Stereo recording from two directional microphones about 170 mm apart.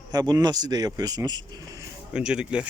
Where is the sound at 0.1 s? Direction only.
25° right (ahead or behind).